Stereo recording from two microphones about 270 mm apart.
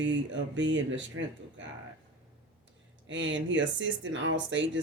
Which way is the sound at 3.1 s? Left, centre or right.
Right.